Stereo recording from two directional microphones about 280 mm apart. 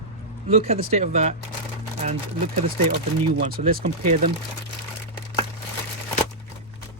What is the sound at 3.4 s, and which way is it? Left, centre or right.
Speech, right.